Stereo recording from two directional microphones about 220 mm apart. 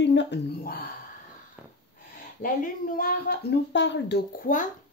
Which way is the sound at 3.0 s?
45° left (ahead or behind).